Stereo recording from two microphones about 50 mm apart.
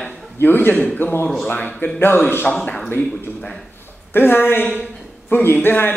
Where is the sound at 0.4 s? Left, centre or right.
Left.